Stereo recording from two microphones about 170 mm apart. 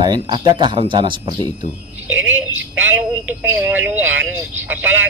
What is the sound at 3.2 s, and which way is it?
Speech, 10° right (ahead or behind).